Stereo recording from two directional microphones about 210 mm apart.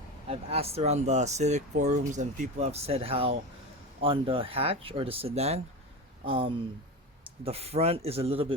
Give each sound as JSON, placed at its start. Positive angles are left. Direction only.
{"t": 0.3, "sound": "speech", "side_deg": -30}